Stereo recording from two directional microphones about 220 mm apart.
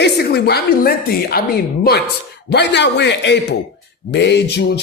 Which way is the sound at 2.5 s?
50° left (ahead or behind).